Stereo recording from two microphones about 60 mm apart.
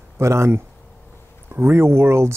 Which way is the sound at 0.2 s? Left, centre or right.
Right.